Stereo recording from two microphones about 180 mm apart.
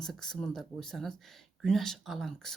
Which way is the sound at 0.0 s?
Centre (ahead or behind).